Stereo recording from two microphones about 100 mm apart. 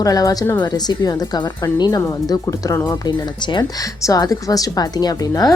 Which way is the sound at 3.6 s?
35° left (ahead or behind).